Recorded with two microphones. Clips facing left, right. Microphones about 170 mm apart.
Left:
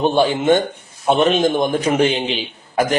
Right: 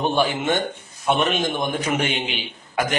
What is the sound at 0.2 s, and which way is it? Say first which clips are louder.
A man's voice: left 6 dB; 30° left (ahead or behind).